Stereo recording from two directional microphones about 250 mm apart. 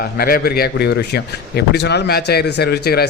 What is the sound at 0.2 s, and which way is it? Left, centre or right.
Speech, left.